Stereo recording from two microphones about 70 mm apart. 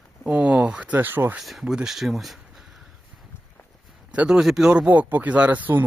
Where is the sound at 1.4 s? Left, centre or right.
Centre.